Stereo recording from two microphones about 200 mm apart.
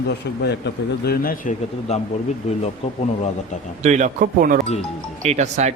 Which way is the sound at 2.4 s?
35° left (ahead or behind).